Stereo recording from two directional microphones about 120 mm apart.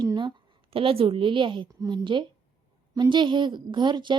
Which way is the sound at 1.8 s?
30° right (ahead or behind).